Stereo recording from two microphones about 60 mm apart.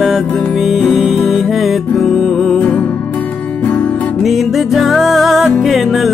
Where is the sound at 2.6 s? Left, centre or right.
Left.